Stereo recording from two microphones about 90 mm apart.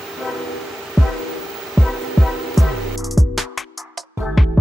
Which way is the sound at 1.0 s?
5° left (ahead or behind).